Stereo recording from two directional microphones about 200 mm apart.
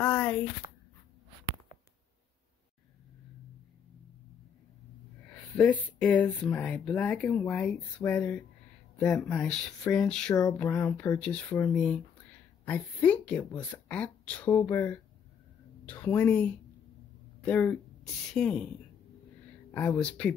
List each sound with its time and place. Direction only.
0.0 s a sound: 5° left (ahead or behind)
0.6 s a sound: 15° right (ahead or behind)
5.6 s speech: 5° left (ahead or behind)
10.3 s speech: 20° left (ahead or behind)
10.7 s speech: 5° left (ahead or behind)
17.5 s speech: 10° left (ahead or behind)
19.7 s speech: 5° left (ahead or behind)